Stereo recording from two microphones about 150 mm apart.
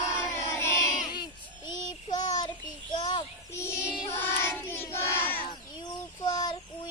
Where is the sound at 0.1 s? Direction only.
20° left (ahead or behind).